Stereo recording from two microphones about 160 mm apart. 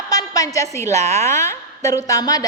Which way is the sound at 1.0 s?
45° right (ahead or behind).